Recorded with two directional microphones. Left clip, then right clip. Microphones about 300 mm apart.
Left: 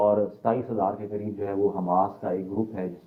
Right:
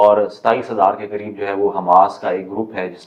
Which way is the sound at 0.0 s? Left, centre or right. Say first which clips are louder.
Right 10 dB; right.